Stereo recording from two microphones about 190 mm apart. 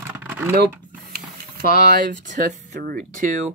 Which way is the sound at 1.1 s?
55° right (ahead or behind).